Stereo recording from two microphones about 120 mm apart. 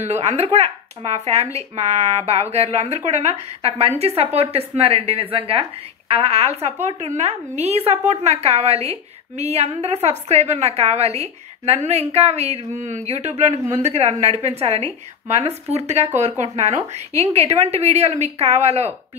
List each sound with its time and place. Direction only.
0.0 s a woman's voice: 65° right (ahead or behind)
16.2 s speech: 75° right (ahead or behind)
16.5 s a woman's voice: 60° right (ahead or behind)